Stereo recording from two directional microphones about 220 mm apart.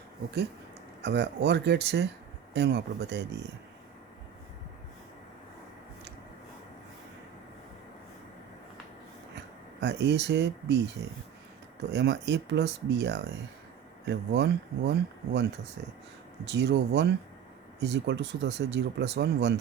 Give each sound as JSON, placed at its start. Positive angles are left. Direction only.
{"t": 1.0, "sound": "speech", "side_deg": -50}
{"t": 9.8, "sound": "speech", "side_deg": -50}
{"t": 11.9, "sound": "speech", "side_deg": -50}